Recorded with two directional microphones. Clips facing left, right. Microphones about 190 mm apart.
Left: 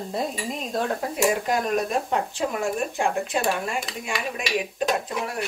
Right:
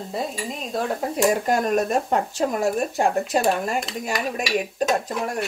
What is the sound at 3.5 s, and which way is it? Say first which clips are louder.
Dishes: right 4 dB; 40° right (ahead or behind).